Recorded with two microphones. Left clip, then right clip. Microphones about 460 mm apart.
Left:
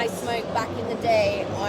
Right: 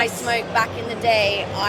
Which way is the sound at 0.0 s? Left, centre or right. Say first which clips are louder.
Right 5 dB; right.